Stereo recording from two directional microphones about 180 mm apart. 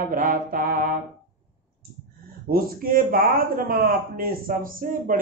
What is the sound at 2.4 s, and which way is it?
A man's voice, 55° right (ahead or behind).